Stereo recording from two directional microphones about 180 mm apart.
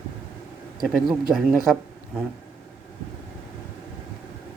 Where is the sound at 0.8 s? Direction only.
Centre (ahead or behind).